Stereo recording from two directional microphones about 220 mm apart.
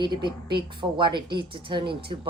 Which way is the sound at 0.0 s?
20° right (ahead or behind).